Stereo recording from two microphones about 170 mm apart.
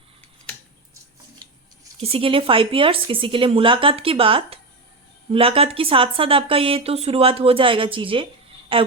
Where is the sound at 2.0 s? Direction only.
35° right (ahead or behind).